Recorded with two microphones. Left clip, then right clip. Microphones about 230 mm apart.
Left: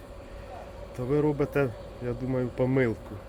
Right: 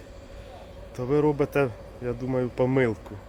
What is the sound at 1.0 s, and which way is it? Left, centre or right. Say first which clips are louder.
Speech: right 3 dB; centre.